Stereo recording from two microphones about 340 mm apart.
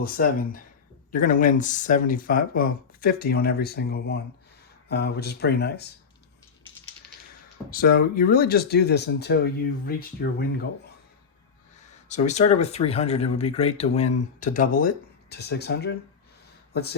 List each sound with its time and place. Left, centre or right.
0.0 s speech: left
7.7 s speech: left
12.0 s speech: left